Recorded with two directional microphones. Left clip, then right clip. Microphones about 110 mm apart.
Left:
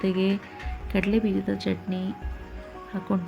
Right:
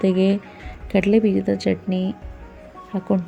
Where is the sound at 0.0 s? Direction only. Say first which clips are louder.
Right 7 dB; 35° right (ahead or behind).